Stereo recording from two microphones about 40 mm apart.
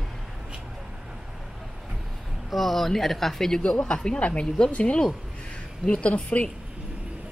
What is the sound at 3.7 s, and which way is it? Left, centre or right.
A woman's voice, left.